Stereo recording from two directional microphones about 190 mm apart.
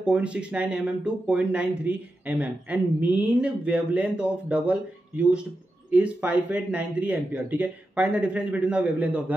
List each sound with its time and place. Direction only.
0.0 s speech: 5° right (ahead or behind)